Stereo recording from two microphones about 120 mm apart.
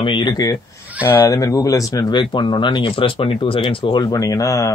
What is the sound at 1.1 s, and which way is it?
Speech, 20° left (ahead or behind).